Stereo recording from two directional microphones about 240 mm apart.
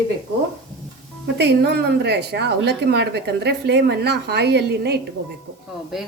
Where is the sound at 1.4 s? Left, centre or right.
Right.